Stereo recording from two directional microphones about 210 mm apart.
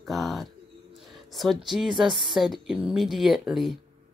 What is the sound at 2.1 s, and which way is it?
A woman's voice, centre (ahead or behind).